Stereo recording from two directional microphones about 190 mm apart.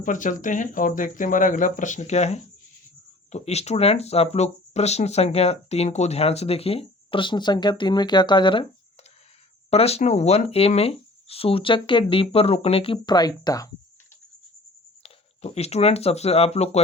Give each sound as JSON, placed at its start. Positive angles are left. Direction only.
{"t": 0.0, "sound": "speech", "side_deg": 40}
{"t": 9.6, "sound": "speech", "side_deg": 35}
{"t": 15.0, "sound": "speech", "side_deg": 35}